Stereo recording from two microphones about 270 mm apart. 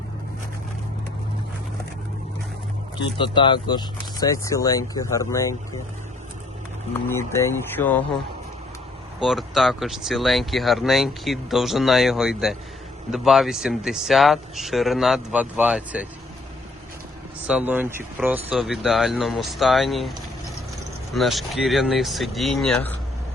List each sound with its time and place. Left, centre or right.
3.2 s speech: centre
7.1 s speech: centre
9.2 s speech: centre
17.5 s speech: centre